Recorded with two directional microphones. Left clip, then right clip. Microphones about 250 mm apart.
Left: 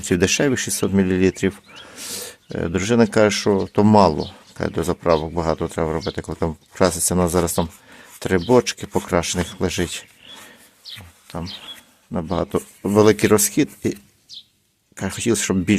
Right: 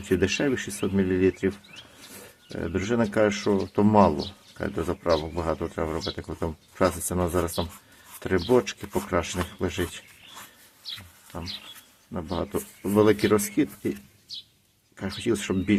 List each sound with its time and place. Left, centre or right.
0.1 s speech: left
12.1 s speech: left
14.9 s speech: left